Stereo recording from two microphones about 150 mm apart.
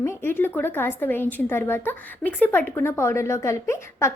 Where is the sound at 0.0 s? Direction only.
15° left (ahead or behind).